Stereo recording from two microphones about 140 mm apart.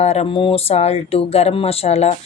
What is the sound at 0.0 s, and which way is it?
Speech, 50° left (ahead or behind).